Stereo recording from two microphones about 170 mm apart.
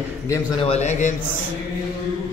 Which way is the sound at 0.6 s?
40° left (ahead or behind).